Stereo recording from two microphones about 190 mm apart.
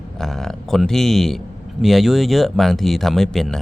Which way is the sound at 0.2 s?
Centre (ahead or behind).